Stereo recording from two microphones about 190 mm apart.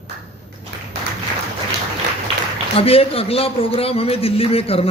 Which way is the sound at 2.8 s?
30° left (ahead or behind).